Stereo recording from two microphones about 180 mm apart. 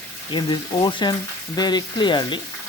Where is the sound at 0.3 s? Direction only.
25° left (ahead or behind).